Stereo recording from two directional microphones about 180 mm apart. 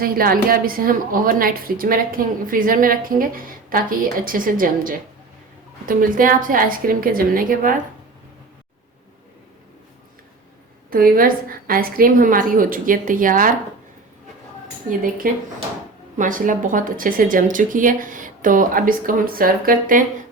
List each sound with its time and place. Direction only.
0.0 s a woman's voice: 55° right (ahead or behind)
10.9 s a woman's voice: 55° right (ahead or behind)
14.8 s a woman's voice: 50° right (ahead or behind)